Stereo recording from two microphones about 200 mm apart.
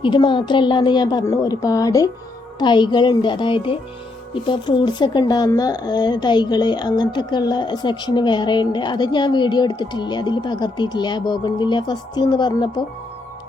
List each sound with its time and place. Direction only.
0.0 s speech: 25° left (ahead or behind)